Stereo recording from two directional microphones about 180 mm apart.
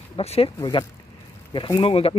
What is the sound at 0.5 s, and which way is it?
Speech, 20° left (ahead or behind).